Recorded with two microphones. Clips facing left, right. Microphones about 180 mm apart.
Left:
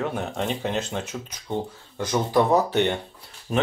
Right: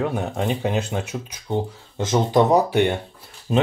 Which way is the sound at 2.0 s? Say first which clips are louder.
Right 3 dB; 20° right (ahead or behind).